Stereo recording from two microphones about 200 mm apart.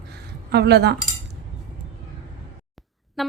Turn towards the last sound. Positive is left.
turn(degrees=0)  # may be behind; listen again after turning